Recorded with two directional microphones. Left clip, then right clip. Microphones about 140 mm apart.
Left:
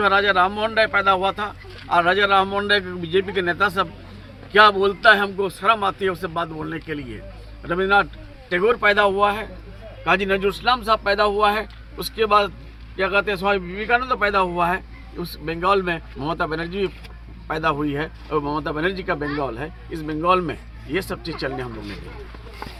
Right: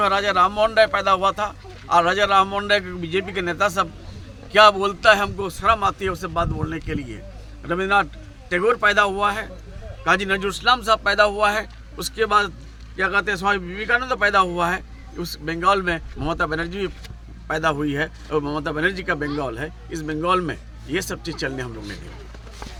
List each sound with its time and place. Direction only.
0.0 s speech: 40° right (ahead or behind)